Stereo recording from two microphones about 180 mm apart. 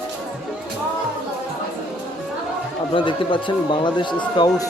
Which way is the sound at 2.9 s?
30° left (ahead or behind).